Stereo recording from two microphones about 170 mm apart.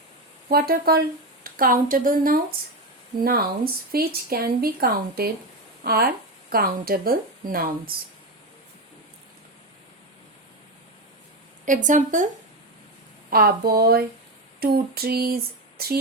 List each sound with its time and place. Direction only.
0.4 s speech: 60° right (ahead or behind)
11.6 s speech: 50° right (ahead or behind)
13.3 s speech: 60° right (ahead or behind)